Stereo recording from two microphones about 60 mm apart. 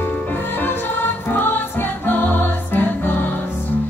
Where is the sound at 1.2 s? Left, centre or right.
Left.